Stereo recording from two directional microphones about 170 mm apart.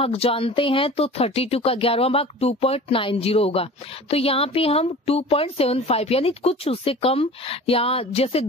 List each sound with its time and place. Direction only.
0.0 s speech: 35° left (ahead or behind)